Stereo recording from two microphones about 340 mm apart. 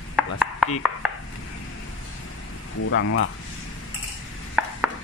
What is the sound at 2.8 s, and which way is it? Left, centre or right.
Speech, left.